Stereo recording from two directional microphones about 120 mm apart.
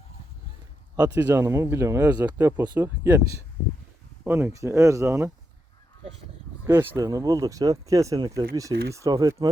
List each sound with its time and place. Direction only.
1.0 s speech: 20° right (ahead or behind)
2.7 s speech: 20° right (ahead or behind)
6.7 s speech: 20° right (ahead or behind)